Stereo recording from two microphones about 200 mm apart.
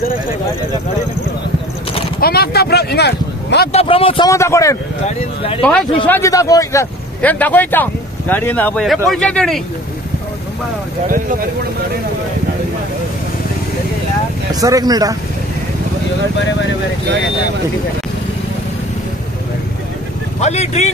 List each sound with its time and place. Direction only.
2.1 s a sound: 50° left (ahead or behind)
3.7 s speech: 25° left (ahead or behind)
4.3 s speech: 15° left (ahead or behind)
5.0 s speech: 30° left (ahead or behind)
5.6 s speech: 5° left (ahead or behind)
14.5 s speech: 20° right (ahead or behind)
16.3 s speech: 65° left (ahead or behind)
20.3 s speech: 35° left (ahead or behind)